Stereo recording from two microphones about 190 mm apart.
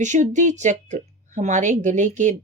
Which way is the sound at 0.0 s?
40° right (ahead or behind).